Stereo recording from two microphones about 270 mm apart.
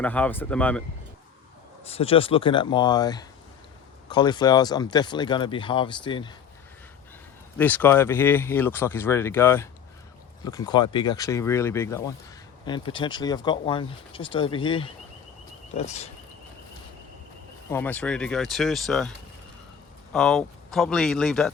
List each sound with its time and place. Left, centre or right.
0.0 s speech: centre
1.9 s speech: left
7.6 s speech: centre; by 16.0 s left
17.7 s speech: centre
20.1 s speech: centre